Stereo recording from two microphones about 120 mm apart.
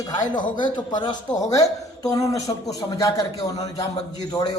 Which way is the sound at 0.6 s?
40° left (ahead or behind).